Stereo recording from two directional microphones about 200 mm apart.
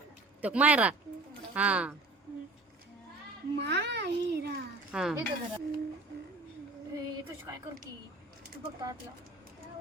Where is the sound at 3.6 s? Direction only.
60° right (ahead or behind).